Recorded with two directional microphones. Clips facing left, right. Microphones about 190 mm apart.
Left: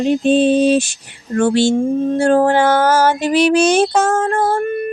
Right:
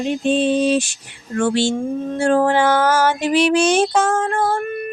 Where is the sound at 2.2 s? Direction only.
40° left (ahead or behind).